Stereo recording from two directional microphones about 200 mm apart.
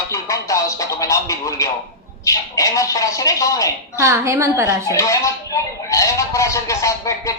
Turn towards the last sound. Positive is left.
turn(degrees=15)  # may be behind; listen again after turning